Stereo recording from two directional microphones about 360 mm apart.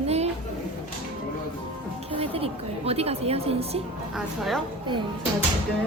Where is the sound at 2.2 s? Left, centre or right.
Centre.